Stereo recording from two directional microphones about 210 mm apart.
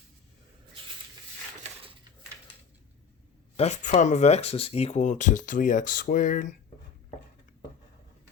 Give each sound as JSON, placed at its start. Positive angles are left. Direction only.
{"t": 3.6, "sound": "speech", "side_deg": 30}